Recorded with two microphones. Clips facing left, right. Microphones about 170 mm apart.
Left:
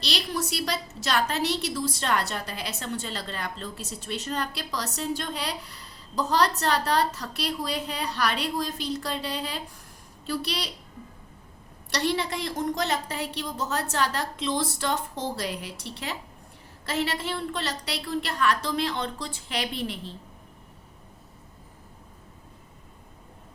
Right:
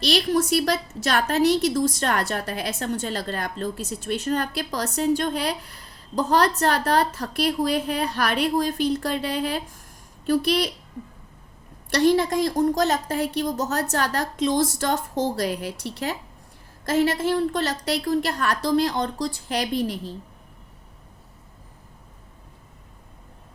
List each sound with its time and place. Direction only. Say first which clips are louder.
0.0 s a woman's voice: right 9 dB; 50° right (ahead or behind)
11.9 s a woman's voice: right 8 dB; 45° right (ahead or behind)